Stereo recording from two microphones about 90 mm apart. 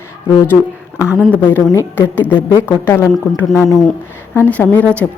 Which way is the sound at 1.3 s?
20° left (ahead or behind).